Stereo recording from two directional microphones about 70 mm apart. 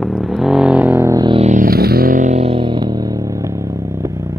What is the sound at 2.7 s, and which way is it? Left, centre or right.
Vehicle, right.